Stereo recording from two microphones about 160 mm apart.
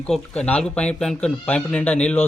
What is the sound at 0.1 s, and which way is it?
Speech, 10° left (ahead or behind).